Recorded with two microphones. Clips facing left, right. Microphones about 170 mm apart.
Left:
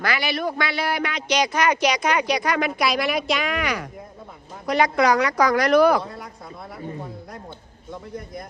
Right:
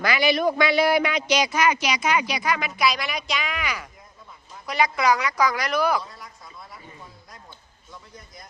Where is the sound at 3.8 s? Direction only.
55° left (ahead or behind).